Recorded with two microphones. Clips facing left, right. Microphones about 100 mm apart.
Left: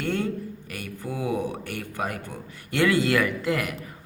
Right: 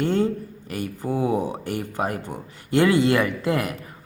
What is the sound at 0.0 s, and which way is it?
Speech, 25° right (ahead or behind).